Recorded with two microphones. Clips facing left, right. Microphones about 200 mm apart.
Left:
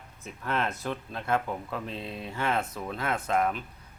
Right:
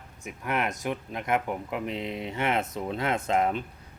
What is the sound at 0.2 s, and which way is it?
Speech, 15° right (ahead or behind).